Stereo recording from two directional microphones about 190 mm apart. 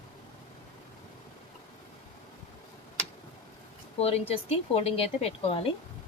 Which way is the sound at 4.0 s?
30° left (ahead or behind).